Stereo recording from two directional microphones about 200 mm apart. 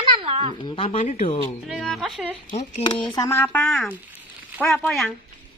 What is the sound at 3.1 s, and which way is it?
A woman's voice, 15° left (ahead or behind).